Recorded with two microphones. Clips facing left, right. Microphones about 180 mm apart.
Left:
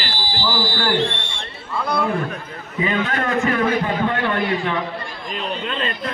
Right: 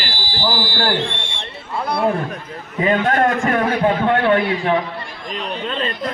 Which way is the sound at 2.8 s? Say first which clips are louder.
Right 6 dB; 45° right (ahead or behind).